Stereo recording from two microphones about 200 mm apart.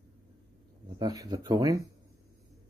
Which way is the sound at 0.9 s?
20° right (ahead or behind).